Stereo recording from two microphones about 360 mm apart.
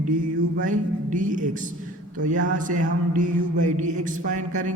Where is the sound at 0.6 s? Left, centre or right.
Right.